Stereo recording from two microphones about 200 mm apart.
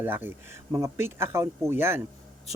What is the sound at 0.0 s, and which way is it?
Speech, 10° right (ahead or behind).